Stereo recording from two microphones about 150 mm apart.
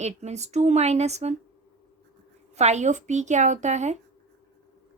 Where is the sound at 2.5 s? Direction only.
50° right (ahead or behind).